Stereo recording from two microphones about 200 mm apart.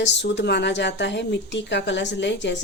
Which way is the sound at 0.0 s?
60° left (ahead or behind).